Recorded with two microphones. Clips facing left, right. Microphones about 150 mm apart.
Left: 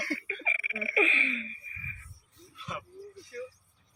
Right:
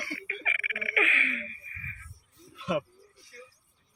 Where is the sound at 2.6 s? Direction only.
90° right.